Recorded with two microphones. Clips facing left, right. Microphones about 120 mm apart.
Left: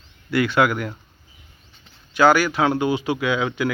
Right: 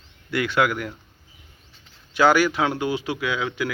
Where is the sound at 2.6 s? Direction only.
10° left (ahead or behind).